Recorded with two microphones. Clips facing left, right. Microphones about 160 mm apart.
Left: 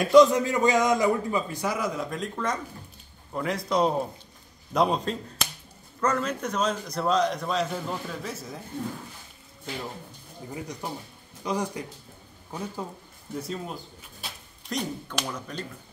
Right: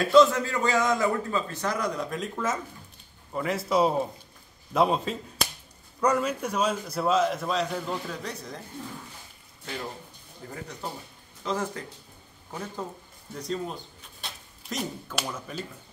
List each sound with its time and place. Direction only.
0.0 s a man's voice: 15° left (ahead or behind)
10.5 s a man's voice: 15° left (ahead or behind); by 15.6 s 5° right (ahead or behind)